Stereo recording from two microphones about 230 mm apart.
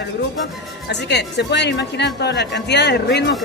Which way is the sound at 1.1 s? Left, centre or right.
Left.